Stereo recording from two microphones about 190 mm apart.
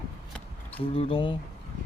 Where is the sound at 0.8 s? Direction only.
30° left (ahead or behind).